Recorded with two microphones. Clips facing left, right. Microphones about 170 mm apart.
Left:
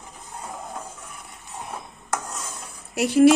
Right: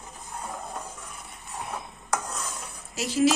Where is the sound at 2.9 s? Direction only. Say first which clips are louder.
Left 8 dB; 60° left (ahead or behind).